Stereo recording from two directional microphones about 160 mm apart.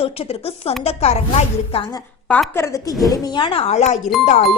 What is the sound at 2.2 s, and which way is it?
Speech, 5° left (ahead or behind).